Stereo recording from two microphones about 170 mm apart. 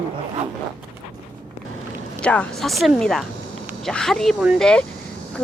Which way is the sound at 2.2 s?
5° left (ahead or behind).